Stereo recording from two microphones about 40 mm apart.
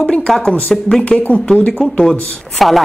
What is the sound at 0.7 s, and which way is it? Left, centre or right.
Speech, centre.